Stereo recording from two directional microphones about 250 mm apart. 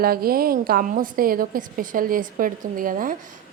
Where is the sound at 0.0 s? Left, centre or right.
Right.